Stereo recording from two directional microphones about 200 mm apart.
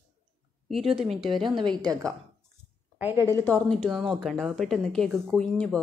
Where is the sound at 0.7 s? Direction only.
Centre (ahead or behind).